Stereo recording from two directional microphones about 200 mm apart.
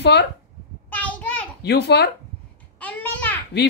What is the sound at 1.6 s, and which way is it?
Speech, 55° left (ahead or behind).